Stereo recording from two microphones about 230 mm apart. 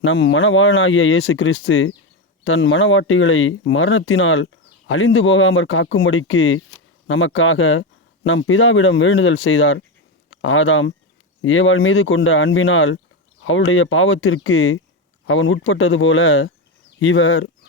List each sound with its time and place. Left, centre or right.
0.0 s speech: left